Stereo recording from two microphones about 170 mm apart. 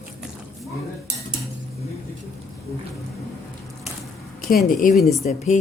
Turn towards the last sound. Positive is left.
turn(degrees=45)  # may be behind; listen again after turning